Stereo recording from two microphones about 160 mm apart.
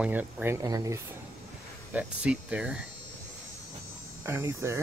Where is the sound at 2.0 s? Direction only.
10° right (ahead or behind).